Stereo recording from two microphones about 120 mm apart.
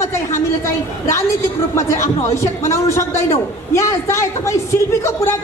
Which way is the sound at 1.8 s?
25° left (ahead or behind).